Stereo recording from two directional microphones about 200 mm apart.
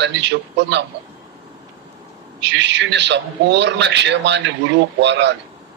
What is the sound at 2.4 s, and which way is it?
A man's voice, 60° right (ahead or behind).